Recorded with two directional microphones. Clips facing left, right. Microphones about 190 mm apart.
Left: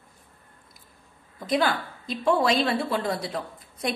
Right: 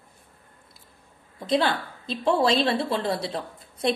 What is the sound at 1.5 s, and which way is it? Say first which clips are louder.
A woman's voice: right 1 dB; 30° right (ahead or behind).